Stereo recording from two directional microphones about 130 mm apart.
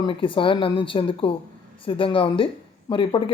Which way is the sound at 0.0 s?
40° left (ahead or behind).